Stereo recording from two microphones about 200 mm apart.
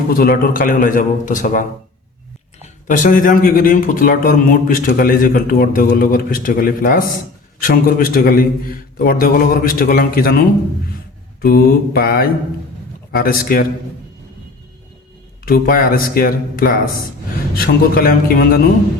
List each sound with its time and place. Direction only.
0.1 s speech: 50° left (ahead or behind)
2.8 s a man's voice: 40° left (ahead or behind)
15.4 s speech: 50° left (ahead or behind)